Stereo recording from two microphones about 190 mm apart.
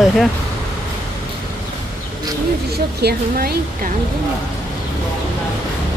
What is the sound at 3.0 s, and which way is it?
Speech, 55° right (ahead or behind).